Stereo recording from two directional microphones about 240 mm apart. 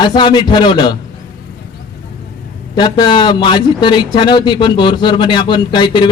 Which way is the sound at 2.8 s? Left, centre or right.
Centre.